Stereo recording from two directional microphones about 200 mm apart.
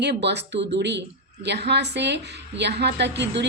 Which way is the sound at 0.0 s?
60° right (ahead or behind).